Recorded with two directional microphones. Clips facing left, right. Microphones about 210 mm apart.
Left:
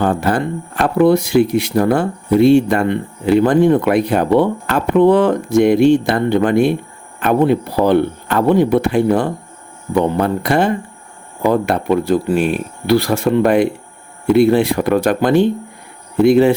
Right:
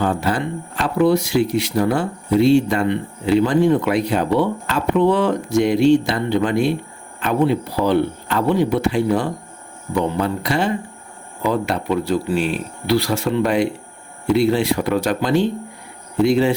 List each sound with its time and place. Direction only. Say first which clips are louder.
0.0 s speech: left 4 dB; 55° left (ahead or behind)